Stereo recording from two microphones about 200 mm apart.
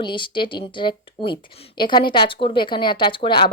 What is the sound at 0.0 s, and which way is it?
A woman's voice, 25° left (ahead or behind).